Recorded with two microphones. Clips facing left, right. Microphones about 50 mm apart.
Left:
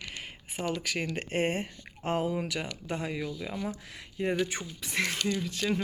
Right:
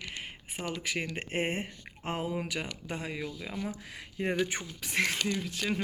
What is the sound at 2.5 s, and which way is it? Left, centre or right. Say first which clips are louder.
Speech: left 2 dB; centre.